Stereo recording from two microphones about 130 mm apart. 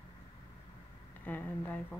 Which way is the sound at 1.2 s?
15° left (ahead or behind).